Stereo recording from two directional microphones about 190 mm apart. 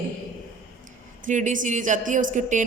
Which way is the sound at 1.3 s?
40° right (ahead or behind).